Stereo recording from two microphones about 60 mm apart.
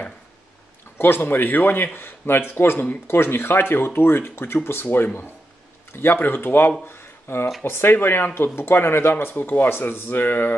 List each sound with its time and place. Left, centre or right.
0.9 s speech: left
6.9 s a sound: left
7.6 s speech: left